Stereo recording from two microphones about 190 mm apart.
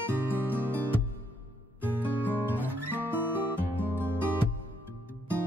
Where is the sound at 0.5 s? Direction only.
10° right (ahead or behind).